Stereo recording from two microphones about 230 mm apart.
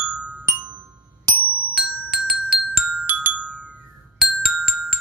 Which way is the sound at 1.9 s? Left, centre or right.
Centre.